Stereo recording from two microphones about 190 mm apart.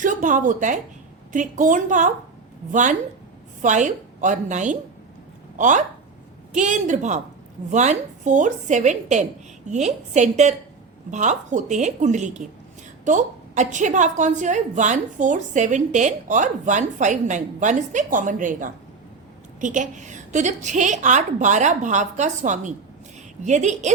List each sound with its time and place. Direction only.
0.0 s a woman's voice: 45° right (ahead or behind)
3.6 s a woman's voice: 40° right (ahead or behind)